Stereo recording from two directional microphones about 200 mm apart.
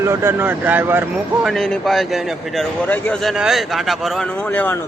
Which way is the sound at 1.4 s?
Centre (ahead or behind).